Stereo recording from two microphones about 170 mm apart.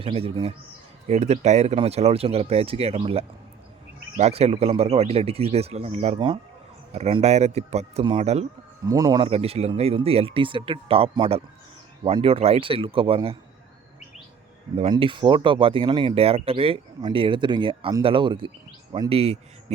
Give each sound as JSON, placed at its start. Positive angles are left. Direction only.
{"t": 0.0, "sound": "speech", "side_deg": -35}
{"t": 6.9, "sound": "speech", "side_deg": -40}
{"t": 8.8, "sound": "speech", "side_deg": -20}
{"t": 14.8, "sound": "speech", "side_deg": -30}